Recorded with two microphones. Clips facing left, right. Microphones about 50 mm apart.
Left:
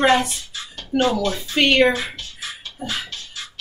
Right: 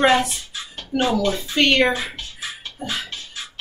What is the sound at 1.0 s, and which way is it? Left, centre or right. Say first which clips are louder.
Speech: even; centre.